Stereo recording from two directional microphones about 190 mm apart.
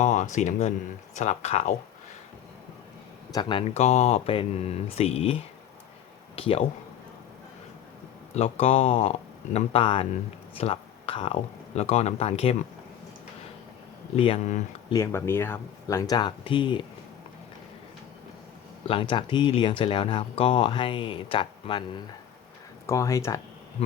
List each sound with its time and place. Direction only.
0.0 s speech: 40° left (ahead or behind)
3.3 s speech: 20° left (ahead or behind)
3.8 s speech: 35° left (ahead or behind)
8.4 s speech: 35° left (ahead or behind)
14.2 s speech: 30° left (ahead or behind)
14.9 s speech: 15° left (ahead or behind)
18.9 s speech: 25° left (ahead or behind)
22.9 s speech: 15° left (ahead or behind)